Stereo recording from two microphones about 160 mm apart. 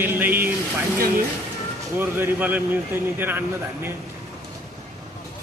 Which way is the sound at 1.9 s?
15° right (ahead or behind).